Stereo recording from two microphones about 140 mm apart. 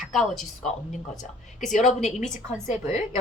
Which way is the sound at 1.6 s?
60° left (ahead or behind).